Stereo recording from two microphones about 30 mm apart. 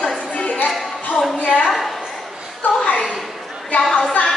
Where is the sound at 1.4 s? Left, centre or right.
Left.